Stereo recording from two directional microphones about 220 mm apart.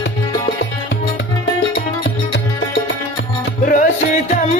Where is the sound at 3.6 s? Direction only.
35° left (ahead or behind).